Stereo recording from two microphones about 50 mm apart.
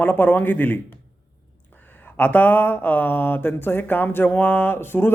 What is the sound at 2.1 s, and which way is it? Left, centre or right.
A man's voice, left.